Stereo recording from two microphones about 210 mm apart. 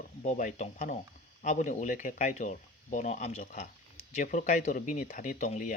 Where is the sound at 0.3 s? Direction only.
35° left (ahead or behind).